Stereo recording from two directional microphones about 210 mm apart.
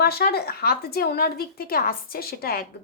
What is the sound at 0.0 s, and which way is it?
Speech, 45° left (ahead or behind).